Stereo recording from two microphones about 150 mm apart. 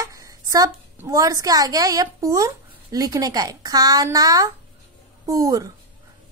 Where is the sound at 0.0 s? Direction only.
20° right (ahead or behind).